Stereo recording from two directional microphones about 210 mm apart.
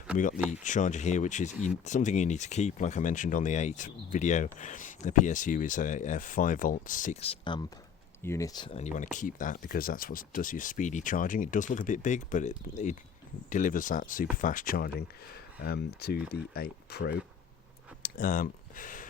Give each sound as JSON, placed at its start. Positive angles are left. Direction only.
{"t": 0.2, "sound": "speech", "side_deg": 40}
{"t": 8.2, "sound": "speech", "side_deg": 15}
{"t": 18.0, "sound": "speech", "side_deg": 40}